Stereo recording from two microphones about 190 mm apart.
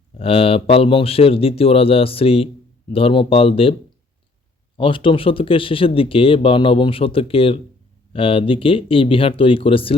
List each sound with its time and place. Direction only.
0.2 s speech: 30° left (ahead or behind)
4.8 s speech: 25° left (ahead or behind)